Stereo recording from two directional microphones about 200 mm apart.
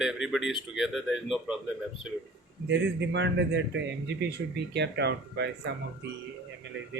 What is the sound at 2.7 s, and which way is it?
A man's voice, 60° right (ahead or behind).